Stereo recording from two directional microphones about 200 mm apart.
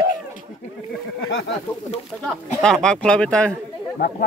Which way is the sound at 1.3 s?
70° left (ahead or behind).